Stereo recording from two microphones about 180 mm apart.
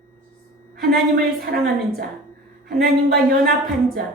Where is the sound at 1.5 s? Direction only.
65° right (ahead or behind).